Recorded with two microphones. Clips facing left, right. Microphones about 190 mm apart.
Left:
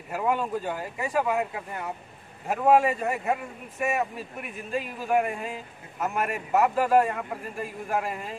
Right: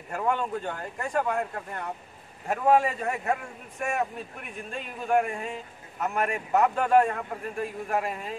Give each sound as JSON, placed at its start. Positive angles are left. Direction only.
{"t": 0.1, "sound": "speech", "side_deg": 5}